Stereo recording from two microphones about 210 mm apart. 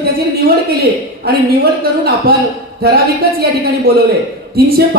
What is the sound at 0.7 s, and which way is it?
A woman's voice, 45° right (ahead or behind).